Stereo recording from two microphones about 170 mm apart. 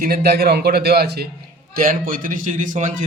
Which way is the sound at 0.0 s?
60° right (ahead or behind).